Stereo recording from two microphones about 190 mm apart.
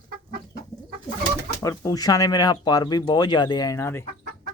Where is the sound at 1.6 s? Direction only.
20° left (ahead or behind).